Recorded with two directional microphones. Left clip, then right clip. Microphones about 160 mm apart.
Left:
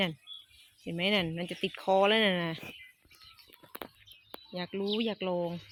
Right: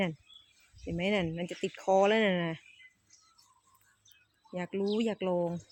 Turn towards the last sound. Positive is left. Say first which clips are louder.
# right 1 dB
turn(degrees=-5)  # may be behind; listen again after turning